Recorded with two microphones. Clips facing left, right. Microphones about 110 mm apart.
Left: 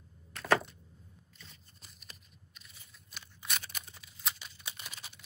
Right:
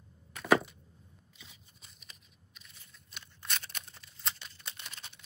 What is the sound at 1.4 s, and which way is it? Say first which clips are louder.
Scissors: even; centre (ahead or behind).